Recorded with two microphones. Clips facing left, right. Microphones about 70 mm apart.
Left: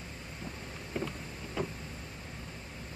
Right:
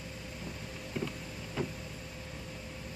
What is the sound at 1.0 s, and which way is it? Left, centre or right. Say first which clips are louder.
Vehicle: left 1 dB; left.